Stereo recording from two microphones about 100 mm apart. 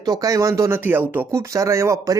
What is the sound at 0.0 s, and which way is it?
Speech, 40° right (ahead or behind).